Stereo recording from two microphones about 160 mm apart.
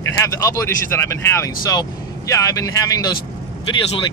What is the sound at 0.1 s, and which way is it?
Speech, 20° left (ahead or behind).